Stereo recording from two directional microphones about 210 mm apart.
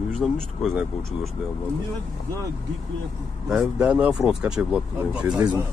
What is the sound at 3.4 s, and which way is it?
Speech, centre (ahead or behind).